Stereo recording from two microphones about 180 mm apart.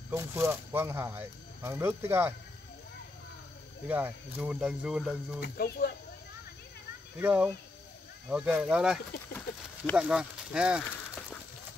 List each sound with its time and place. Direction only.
0.1 s speech: 15° right (ahead or behind)
3.8 s speech: 10° right (ahead or behind)
5.4 s speech: 60° left (ahead or behind)
7.2 s speech: 10° right (ahead or behind)